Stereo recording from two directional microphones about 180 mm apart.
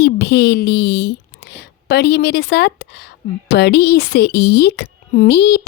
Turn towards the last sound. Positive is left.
turn(degrees=70)  # may be behind; listen again after turning